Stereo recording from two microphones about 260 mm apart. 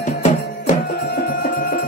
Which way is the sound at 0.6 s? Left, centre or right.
Left.